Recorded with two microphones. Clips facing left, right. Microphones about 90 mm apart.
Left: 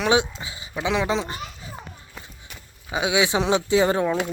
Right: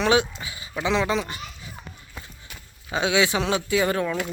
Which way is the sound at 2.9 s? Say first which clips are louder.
Even; 15° left (ahead or behind).